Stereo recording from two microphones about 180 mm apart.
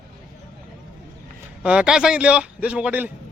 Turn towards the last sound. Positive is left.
turn(degrees=-10)  # may be behind; listen again after turning